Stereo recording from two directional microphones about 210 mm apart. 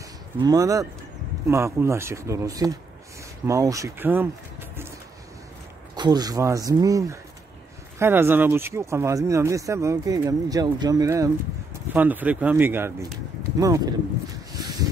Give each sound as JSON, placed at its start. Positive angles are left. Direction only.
{"t": 0.4, "sound": "speech", "side_deg": -15}
{"t": 5.9, "sound": "speech", "side_deg": -20}